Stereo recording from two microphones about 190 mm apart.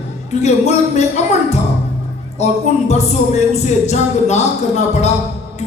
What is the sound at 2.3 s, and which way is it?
A woman's voice, 35° left (ahead or behind).